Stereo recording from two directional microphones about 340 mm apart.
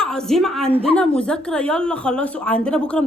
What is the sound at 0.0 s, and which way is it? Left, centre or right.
A woman's voice, centre.